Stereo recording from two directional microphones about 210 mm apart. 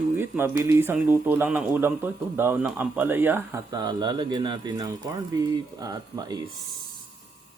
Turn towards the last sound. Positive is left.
turn(degrees=-20)  # may be behind; listen again after turning